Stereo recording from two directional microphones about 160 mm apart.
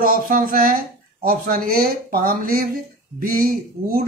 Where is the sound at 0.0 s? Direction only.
60° right (ahead or behind).